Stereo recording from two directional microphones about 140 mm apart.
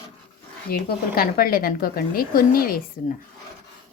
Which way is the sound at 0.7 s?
90° left.